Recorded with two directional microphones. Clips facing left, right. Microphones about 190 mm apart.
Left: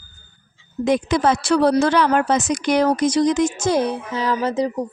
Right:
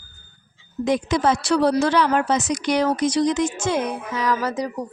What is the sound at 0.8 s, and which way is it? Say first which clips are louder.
Speech: left 2 dB; 60° left (ahead or behind).